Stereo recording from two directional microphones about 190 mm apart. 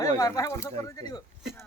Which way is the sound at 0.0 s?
20° left (ahead or behind).